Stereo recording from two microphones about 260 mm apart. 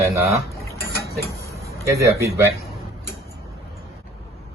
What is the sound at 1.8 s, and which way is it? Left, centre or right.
Speech, centre.